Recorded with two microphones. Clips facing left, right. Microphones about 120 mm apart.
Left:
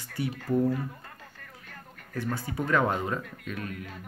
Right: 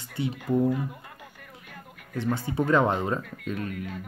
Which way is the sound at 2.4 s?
25° right (ahead or behind).